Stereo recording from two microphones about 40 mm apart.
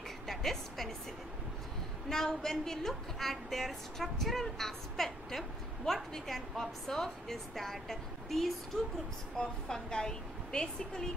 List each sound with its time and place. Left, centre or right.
0.3 s music: centre
2.0 s a woman's voice: centre
9.4 s a woman's voice: centre